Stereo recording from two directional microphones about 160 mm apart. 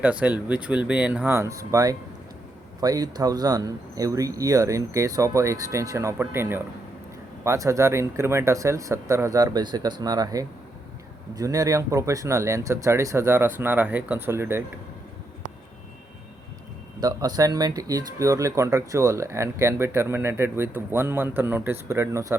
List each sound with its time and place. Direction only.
0.0 s speech: 10° right (ahead or behind)
17.0 s speech: 25° right (ahead or behind)